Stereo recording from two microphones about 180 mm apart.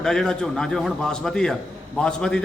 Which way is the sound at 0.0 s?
5° left (ahead or behind).